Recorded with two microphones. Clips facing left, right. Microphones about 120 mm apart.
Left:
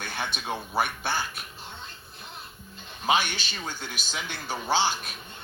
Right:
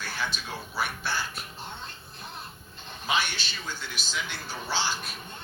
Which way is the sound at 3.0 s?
50° left (ahead or behind).